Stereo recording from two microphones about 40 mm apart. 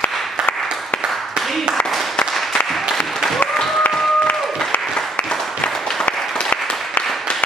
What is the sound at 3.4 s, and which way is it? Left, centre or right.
Applause, left.